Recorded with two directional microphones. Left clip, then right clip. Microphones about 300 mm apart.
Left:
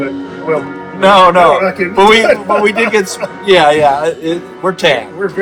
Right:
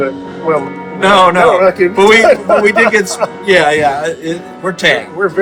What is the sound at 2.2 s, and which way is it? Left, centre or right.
Speech, centre.